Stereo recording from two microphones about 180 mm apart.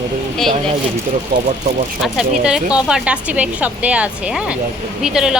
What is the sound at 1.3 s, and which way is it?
Speech, 60° right (ahead or behind).